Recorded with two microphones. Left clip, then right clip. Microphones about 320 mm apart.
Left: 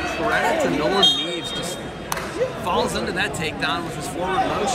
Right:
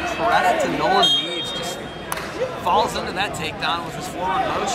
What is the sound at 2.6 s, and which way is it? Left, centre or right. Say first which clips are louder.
Speech: right 6 dB; centre.